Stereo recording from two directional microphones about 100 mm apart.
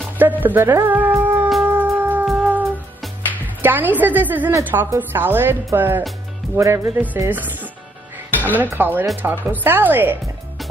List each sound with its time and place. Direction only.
0.2 s music: 15° right (ahead or behind)
3.4 s speech: 20° right (ahead or behind)